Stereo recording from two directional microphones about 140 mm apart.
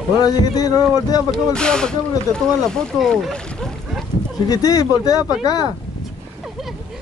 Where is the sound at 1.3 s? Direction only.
5° left (ahead or behind).